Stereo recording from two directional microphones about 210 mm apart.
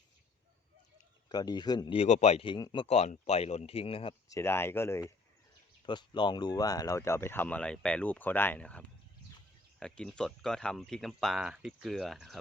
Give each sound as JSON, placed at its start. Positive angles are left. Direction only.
{"t": 1.3, "sound": "speech", "side_deg": 20}
{"t": 2.8, "sound": "speech", "side_deg": 30}
{"t": 4.3, "sound": "speech", "side_deg": 10}